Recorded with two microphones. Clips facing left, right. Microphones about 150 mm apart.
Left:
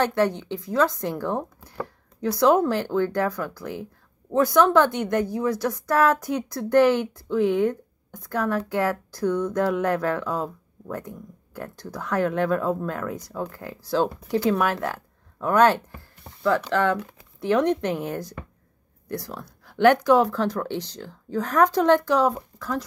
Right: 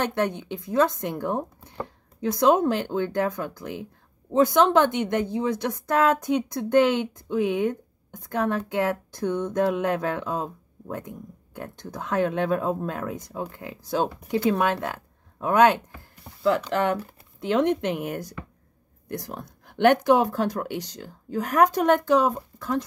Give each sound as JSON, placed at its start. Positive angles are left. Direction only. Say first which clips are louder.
{"t": 0.1, "sound": "a woman's voice", "louder": "left 3 dB", "side_deg": -20}